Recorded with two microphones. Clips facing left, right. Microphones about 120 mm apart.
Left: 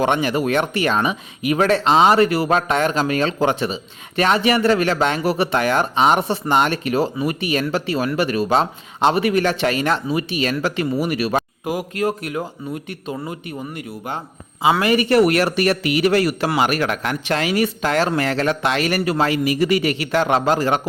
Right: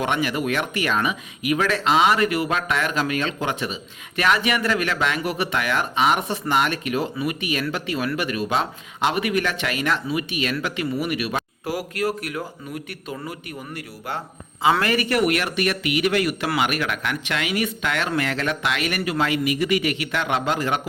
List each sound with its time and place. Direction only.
0.0 s speech: 30° left (ahead or behind)
11.6 s a man's voice: 20° left (ahead or behind)
14.6 s a man's voice: 15° left (ahead or behind)
15.1 s speech: 35° left (ahead or behind)